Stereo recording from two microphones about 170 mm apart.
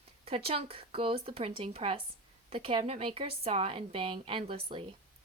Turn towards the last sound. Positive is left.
turn(degrees=-30)  # may be behind; listen again after turning